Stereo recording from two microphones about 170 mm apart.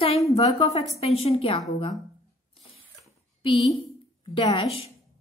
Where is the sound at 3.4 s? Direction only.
35° left (ahead or behind).